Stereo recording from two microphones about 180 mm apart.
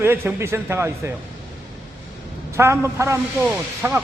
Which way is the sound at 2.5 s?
15° right (ahead or behind).